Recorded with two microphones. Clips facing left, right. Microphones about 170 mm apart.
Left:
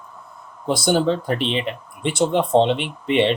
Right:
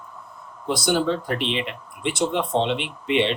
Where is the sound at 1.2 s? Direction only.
35° left (ahead or behind).